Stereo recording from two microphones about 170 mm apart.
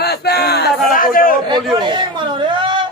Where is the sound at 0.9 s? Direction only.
55° left (ahead or behind).